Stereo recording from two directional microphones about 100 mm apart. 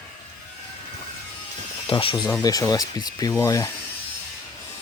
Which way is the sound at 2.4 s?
40° left (ahead or behind).